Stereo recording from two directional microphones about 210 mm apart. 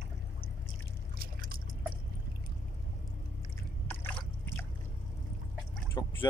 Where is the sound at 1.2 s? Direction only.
45° right (ahead or behind).